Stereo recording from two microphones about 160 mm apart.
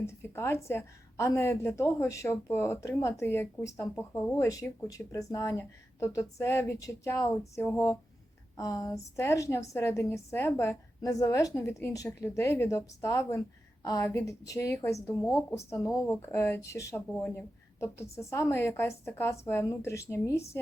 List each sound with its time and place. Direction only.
0.0 s a woman's voice: 15° left (ahead or behind)